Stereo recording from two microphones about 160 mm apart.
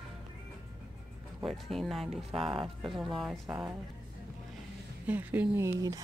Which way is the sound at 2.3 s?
30° right (ahead or behind).